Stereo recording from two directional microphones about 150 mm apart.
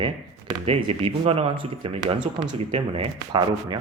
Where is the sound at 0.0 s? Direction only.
40° right (ahead or behind).